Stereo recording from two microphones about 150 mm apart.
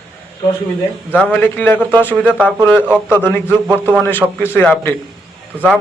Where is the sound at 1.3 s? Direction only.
10° left (ahead or behind).